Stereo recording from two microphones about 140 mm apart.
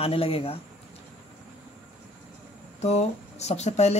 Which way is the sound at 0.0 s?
45° left (ahead or behind).